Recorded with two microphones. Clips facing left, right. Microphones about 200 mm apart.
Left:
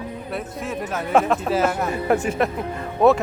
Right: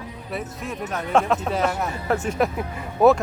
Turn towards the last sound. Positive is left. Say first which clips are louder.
# even
turn(degrees=0)  # may be behind; listen again after turning